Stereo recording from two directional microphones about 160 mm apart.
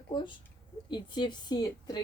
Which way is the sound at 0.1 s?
30° left (ahead or behind).